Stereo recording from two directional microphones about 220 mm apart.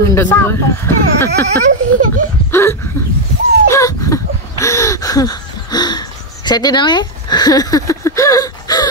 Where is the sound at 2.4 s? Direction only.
10° left (ahead or behind).